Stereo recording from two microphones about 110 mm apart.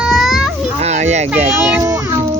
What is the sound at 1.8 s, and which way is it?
Music, 25° right (ahead or behind).